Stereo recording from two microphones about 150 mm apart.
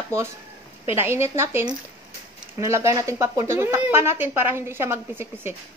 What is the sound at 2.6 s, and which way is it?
A woman's voice, 20° right (ahead or behind).